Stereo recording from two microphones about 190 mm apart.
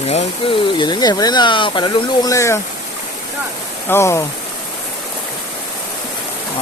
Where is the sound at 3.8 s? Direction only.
15° left (ahead or behind).